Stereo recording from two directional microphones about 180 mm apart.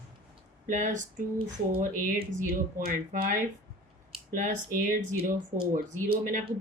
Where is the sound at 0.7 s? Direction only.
45° right (ahead or behind).